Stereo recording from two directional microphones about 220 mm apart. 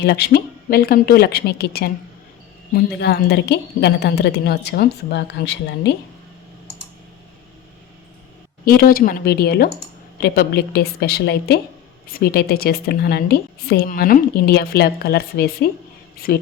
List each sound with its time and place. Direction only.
0.0 s a woman's voice: 50° left (ahead or behind)
8.6 s a woman's voice: 40° left (ahead or behind)